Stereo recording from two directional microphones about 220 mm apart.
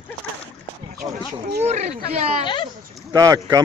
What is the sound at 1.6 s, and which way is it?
Speech, 30° right (ahead or behind).